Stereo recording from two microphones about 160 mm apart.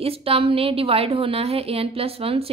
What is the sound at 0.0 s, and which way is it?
A woman's voice, 35° right (ahead or behind).